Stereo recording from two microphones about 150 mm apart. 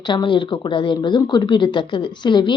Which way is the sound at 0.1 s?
30° left (ahead or behind).